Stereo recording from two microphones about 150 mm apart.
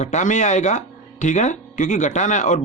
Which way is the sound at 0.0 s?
55° left (ahead or behind).